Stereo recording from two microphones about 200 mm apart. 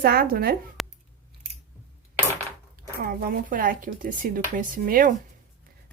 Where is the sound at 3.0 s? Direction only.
45° right (ahead or behind).